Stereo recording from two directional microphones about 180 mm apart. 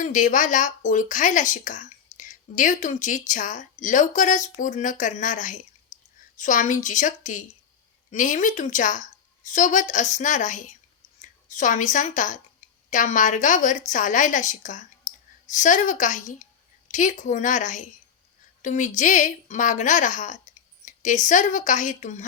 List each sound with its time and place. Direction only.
0.0 s a woman's voice: 45° left (ahead or behind)